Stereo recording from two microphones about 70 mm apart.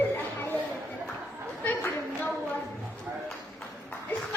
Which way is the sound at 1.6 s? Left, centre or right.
Left.